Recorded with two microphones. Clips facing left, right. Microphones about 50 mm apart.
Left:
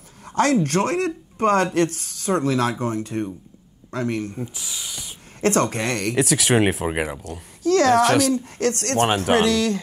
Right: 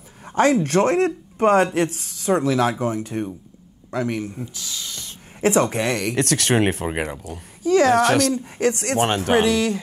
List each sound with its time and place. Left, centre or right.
0.2 s a sound: right
0.7 s speech: right
1.5 s a man's voice: centre
4.6 s a sound: centre
5.4 s speech: centre
6.1 s speech: centre
7.6 s speech: centre
8.5 s speech: centre
9.0 s speech: centre
9.4 s speech: centre